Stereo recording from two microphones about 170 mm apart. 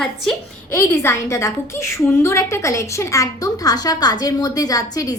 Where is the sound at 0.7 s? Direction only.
15° left (ahead or behind).